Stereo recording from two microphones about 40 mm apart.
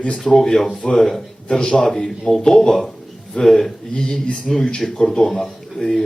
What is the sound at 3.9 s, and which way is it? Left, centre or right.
Speech, centre.